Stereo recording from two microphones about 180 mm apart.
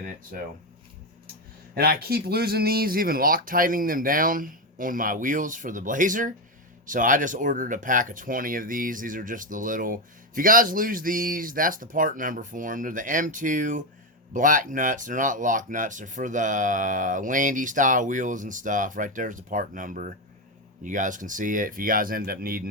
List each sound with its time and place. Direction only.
0.3 s speech: 55° right (ahead or behind)
1.7 s speech: 60° right (ahead or behind)